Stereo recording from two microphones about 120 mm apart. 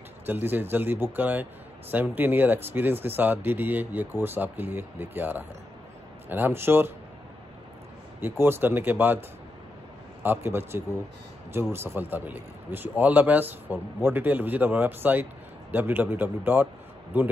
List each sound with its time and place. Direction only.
0.3 s a man's voice: 15° right (ahead or behind)
8.2 s a man's voice: 20° right (ahead or behind)
10.2 s a man's voice: 15° right (ahead or behind)